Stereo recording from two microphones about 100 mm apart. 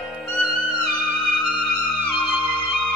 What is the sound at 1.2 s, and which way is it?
Music, 10° left (ahead or behind).